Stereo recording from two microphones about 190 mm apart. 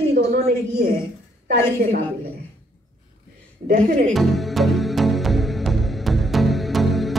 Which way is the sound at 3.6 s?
50° right (ahead or behind).